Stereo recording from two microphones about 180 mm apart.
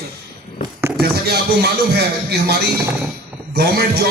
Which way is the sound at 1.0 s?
60° right (ahead or behind).